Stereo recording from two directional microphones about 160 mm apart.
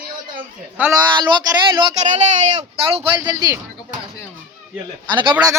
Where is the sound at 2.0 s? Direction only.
45° right (ahead or behind).